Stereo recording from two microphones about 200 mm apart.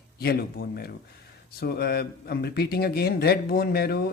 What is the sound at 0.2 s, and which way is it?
Speech, 50° left (ahead or behind).